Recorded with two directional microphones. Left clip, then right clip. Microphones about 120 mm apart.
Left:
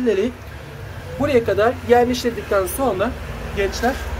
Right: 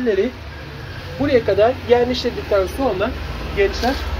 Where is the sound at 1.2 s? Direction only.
50° left (ahead or behind).